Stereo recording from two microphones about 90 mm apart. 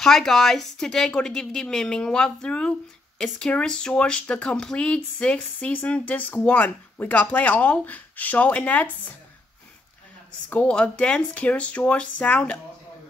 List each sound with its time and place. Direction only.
0.0 s speech: 5° left (ahead or behind)
10.5 s speech: 15° left (ahead or behind)